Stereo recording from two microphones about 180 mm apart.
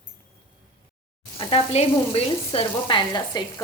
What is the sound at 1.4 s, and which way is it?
Sizzle, 30° left (ahead or behind).